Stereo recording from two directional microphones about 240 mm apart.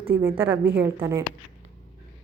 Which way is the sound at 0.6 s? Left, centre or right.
Right.